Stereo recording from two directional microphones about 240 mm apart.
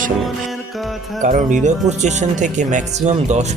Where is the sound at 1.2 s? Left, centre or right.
Right.